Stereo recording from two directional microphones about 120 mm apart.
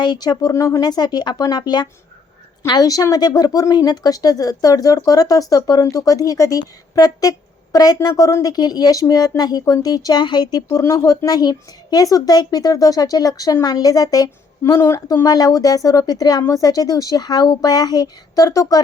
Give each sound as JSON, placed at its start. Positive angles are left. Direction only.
{"t": 0.0, "sound": "speech", "side_deg": 35}